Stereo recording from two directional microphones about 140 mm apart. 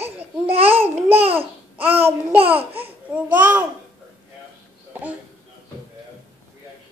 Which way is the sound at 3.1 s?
10° right (ahead or behind).